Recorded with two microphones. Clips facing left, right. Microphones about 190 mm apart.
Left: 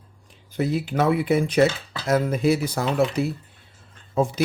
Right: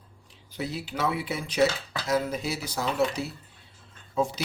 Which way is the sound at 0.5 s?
50° left (ahead or behind).